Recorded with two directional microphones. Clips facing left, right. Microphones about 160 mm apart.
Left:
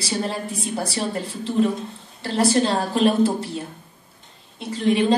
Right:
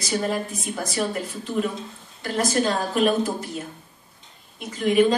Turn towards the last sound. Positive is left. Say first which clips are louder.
# even
turn(degrees=30)  # may be behind; listen again after turning